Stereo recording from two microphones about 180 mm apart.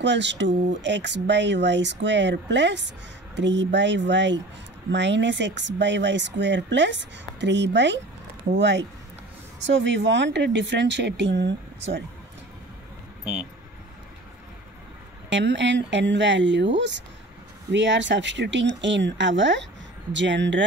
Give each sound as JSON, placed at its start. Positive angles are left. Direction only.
{"t": 0.0, "sound": "speech", "side_deg": -80}
{"t": 13.2, "sound": "speech", "side_deg": -5}
{"t": 15.2, "sound": "speech", "side_deg": -80}